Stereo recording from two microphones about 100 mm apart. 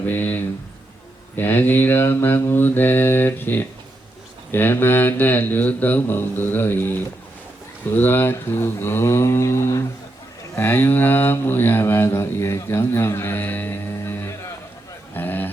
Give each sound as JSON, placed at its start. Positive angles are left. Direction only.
{"t": 0.0, "sound": "speech", "side_deg": 15}